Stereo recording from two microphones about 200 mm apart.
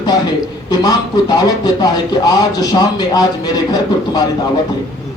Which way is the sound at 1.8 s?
20° left (ahead or behind).